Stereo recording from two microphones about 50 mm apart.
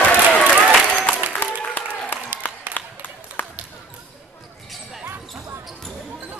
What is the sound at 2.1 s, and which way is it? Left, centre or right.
Applause, left.